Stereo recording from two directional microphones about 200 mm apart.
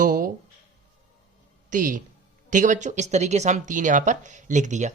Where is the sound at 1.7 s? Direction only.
40° right (ahead or behind).